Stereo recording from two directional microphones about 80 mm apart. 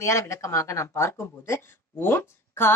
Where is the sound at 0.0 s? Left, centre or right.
Left.